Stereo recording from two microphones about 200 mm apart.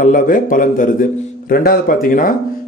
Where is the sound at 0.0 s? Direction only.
40° left (ahead or behind).